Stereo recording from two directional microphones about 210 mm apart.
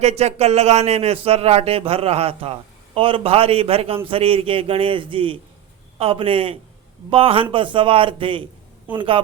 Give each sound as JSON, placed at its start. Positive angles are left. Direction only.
{"t": 0.0, "sound": "speech", "side_deg": -30}